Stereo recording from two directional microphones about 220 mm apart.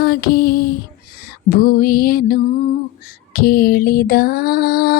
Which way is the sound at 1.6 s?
40° left (ahead or behind).